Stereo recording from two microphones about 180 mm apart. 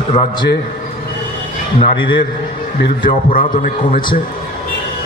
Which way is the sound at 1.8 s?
25° left (ahead or behind).